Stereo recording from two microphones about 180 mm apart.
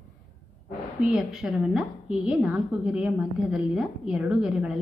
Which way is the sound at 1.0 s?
5° right (ahead or behind).